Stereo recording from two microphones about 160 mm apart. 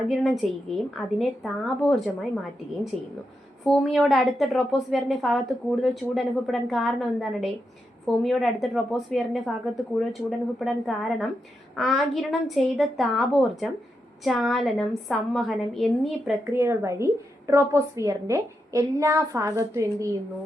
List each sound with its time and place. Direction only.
0.1 s a woman's voice: centre (ahead or behind)
3.6 s a woman's voice: centre (ahead or behind)
16.5 s a woman's voice: 15° right (ahead or behind)